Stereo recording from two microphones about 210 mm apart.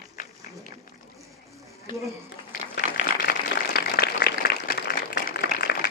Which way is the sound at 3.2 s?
50° left (ahead or behind).